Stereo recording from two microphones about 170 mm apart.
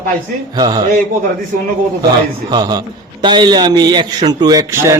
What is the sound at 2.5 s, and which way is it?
A man's voice, 25° right (ahead or behind).